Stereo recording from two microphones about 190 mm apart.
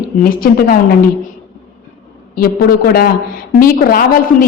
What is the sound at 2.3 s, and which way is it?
A man's voice, 50° left (ahead or behind).